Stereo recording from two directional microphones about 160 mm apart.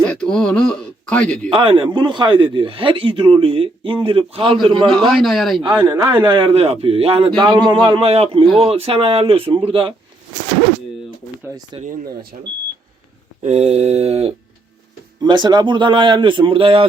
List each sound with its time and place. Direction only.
0.0 s speech: 5° left (ahead or behind)
1.5 s a man's voice: 30° right (ahead or behind)
4.9 s a man's voice: centre (ahead or behind)
5.8 s a man's voice: 30° right (ahead or behind)
11.4 s a man's voice: 20° right (ahead or behind)
11.8 s speech: 60° right (ahead or behind)
13.4 s a man's voice: 40° right (ahead or behind)
15.2 s a man's voice: 25° right (ahead or behind)